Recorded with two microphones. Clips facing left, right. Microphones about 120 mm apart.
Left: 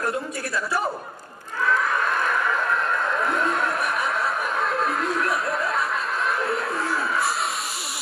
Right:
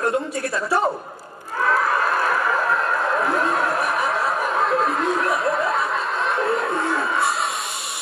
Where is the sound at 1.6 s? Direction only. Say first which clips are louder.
Right 3 dB; 35° right (ahead or behind).